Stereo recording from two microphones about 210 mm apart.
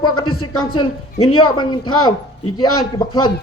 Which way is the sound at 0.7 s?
20° left (ahead or behind).